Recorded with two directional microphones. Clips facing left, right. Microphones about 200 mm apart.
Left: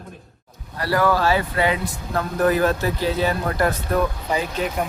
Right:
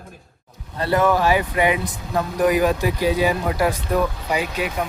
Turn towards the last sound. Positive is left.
turn(degrees=-10)  # may be behind; listen again after turning